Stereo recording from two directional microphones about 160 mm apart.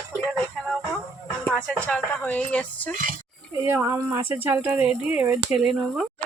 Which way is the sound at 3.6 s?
15° right (ahead or behind).